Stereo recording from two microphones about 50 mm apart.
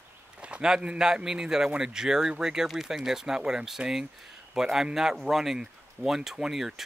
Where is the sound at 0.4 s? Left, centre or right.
Right.